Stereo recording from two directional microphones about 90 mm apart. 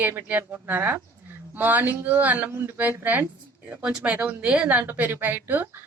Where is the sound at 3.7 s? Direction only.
10° right (ahead or behind).